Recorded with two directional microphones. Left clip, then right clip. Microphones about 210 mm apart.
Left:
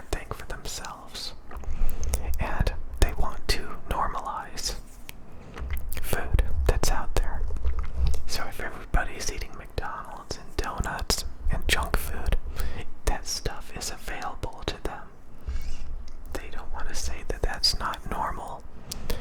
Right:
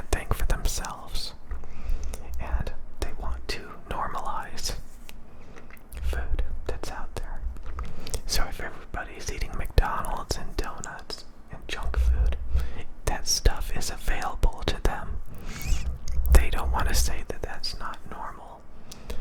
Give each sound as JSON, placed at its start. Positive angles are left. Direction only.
{"t": 0.1, "sound": "whispering", "side_deg": -15}
{"t": 1.8, "sound": "whispering", "side_deg": 15}
{"t": 5.9, "sound": "whispering", "side_deg": 15}
{"t": 7.8, "sound": "whispering", "side_deg": -10}
{"t": 9.5, "sound": "whispering", "side_deg": -15}
{"t": 10.7, "sound": "whispering", "side_deg": 15}
{"t": 15.4, "sound": "rodents", "side_deg": -35}
{"t": 16.3, "sound": "whispering", "side_deg": -25}
{"t": 17.2, "sound": "whispering", "side_deg": 5}